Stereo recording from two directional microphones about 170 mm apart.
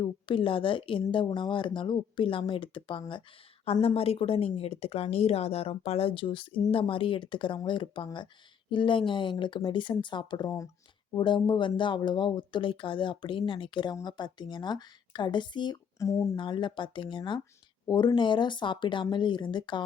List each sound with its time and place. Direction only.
0.0 s speech: 30° left (ahead or behind)